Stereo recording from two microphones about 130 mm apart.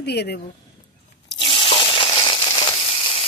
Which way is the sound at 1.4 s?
40° left (ahead or behind).